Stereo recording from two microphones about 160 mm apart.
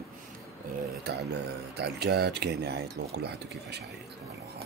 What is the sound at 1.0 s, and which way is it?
Speech, 90° right.